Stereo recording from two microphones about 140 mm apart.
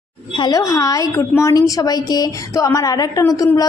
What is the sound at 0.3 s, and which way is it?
A woman's voice, 30° left (ahead or behind).